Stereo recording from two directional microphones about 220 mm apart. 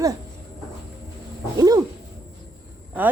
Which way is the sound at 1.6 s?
15° right (ahead or behind).